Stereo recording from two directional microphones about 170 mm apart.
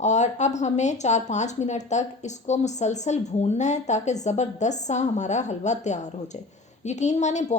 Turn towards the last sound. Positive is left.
turn(degrees=45)  # may be behind; listen again after turning